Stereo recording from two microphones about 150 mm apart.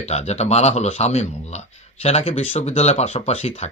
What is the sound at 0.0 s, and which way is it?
Speech, 45° left (ahead or behind).